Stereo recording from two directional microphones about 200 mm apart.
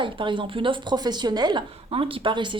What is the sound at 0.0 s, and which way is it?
Speech, 25° right (ahead or behind).